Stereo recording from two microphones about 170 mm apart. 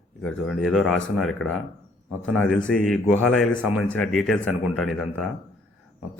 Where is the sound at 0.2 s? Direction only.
5° left (ahead or behind).